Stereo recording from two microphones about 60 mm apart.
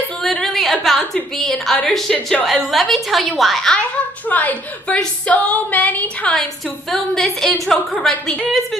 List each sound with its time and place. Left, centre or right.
0.2 s a sound: centre
1.1 s a woman's voice: centre
4.3 s female singing: left
6.9 s a woman's voice: centre